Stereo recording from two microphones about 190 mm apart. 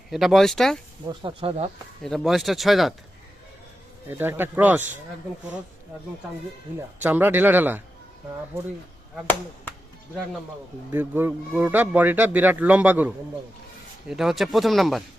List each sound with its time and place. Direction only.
0.1 s speech: centre (ahead or behind)
1.0 s speech: 25° right (ahead or behind)
2.0 s speech: centre (ahead or behind)
4.1 s speech: 10° right (ahead or behind)
7.0 s speech: 10° right (ahead or behind)
10.9 s speech: 10° right (ahead or behind)